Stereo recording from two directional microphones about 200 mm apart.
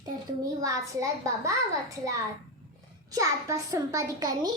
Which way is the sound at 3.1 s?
15° right (ahead or behind).